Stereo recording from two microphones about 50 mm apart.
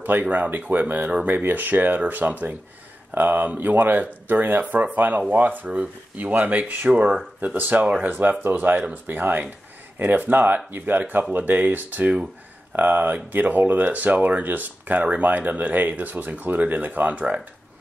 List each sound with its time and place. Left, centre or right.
0.0 s speech: right